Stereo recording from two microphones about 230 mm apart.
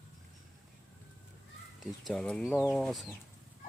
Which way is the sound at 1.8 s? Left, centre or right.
Centre.